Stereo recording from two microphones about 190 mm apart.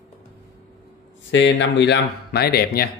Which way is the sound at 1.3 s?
70° left (ahead or behind).